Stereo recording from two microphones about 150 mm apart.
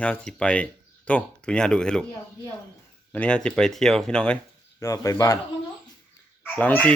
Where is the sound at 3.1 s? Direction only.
5° left (ahead or behind).